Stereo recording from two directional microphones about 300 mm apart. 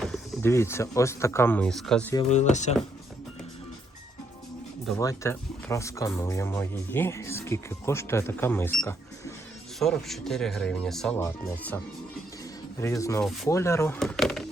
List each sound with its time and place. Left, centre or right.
0.0 s speech: centre
2.3 s speech: left
4.9 s speech: centre
12.8 s speech: centre